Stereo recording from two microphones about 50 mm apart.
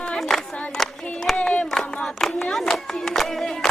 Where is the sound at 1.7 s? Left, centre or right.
Centre.